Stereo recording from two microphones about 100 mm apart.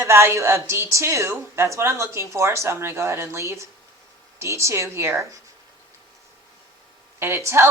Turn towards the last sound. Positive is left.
turn(degrees=-25)  # may be behind; listen again after turning